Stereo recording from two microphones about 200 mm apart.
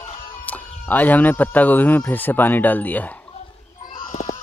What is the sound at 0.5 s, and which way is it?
Speech, 10° left (ahead or behind).